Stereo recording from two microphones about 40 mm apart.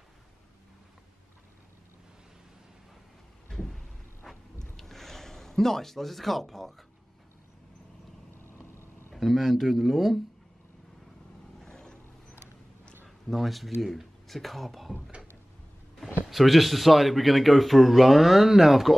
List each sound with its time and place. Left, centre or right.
3.5 s a sound: centre
8.5 s vehicle: left
9.1 s speech: centre
11.6 s vehicle: centre
13.3 s speech: centre
16.3 s speech: centre